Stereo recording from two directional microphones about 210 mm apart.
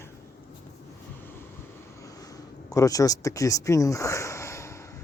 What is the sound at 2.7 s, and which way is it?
Speech, 15° left (ahead or behind).